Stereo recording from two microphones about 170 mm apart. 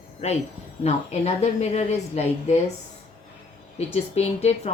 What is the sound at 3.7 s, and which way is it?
Speech, 40° left (ahead or behind).